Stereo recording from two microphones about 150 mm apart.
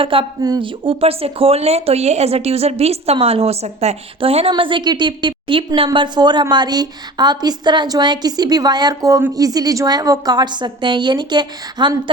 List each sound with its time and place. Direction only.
0.0 s speech: 35° right (ahead or behind)